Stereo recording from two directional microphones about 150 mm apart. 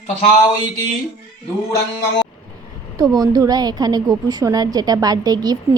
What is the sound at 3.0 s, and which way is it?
A woman's voice, 25° right (ahead or behind).